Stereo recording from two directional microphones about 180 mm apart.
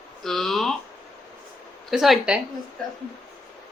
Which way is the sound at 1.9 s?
Centre (ahead or behind).